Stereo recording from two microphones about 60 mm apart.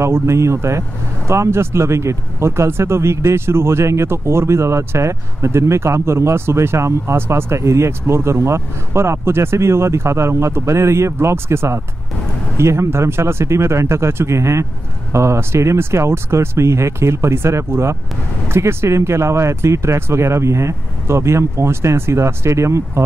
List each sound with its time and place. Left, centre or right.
0.0 s speech: right